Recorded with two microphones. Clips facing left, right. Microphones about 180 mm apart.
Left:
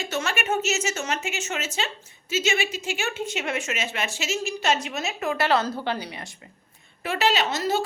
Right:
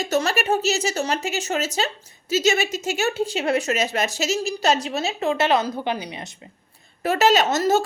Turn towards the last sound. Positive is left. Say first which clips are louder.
# right 5 dB
turn(degrees=-45)  # may be behind; listen again after turning